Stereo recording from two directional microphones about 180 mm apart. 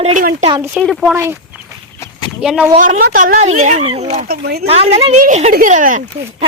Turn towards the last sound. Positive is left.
turn(degrees=-45)  # may be behind; listen again after turning